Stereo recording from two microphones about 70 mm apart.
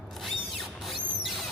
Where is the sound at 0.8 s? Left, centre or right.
Centre.